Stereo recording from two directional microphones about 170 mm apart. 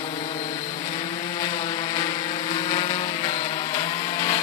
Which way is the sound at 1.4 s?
25° left (ahead or behind).